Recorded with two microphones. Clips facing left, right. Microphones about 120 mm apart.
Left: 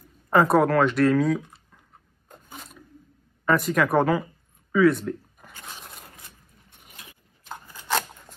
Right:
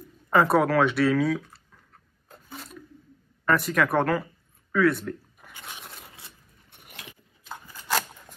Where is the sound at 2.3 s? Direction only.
Centre (ahead or behind).